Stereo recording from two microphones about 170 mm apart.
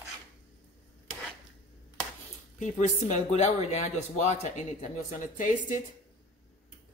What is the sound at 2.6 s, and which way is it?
Speech, 40° left (ahead or behind).